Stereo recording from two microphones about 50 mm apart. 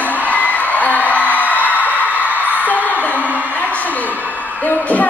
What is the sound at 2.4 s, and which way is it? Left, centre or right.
Music, left.